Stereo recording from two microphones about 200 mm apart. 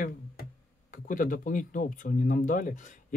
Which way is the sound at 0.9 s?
40° left (ahead or behind).